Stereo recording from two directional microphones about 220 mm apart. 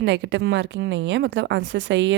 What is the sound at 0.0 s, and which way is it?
Speech, 55° right (ahead or behind).